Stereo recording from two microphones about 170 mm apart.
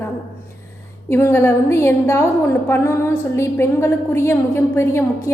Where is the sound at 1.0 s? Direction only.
15° left (ahead or behind).